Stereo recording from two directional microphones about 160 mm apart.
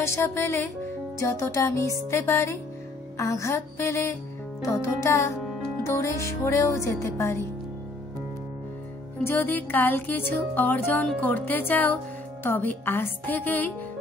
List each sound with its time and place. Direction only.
0.0 s speech: 15° left (ahead or behind)
9.2 s speech: 15° left (ahead or behind)